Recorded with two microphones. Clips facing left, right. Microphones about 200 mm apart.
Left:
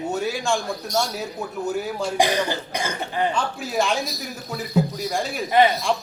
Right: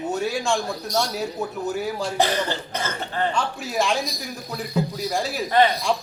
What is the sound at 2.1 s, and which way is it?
Cough, 15° left (ahead or behind).